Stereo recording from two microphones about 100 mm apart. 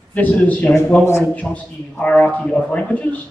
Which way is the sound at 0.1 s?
15° left (ahead or behind).